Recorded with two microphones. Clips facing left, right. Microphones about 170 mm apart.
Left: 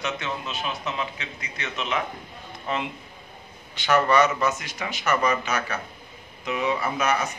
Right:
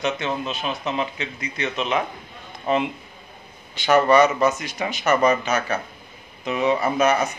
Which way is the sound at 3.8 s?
25° right (ahead or behind).